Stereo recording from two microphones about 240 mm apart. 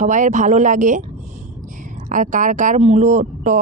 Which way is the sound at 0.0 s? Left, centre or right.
Right.